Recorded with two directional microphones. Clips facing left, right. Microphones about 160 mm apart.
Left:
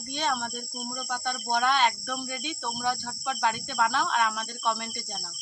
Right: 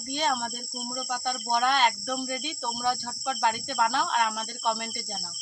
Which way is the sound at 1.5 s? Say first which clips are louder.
Even; 35° right (ahead or behind).